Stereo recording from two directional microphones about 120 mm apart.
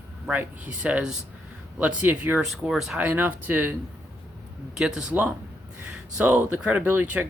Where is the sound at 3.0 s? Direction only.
15° right (ahead or behind).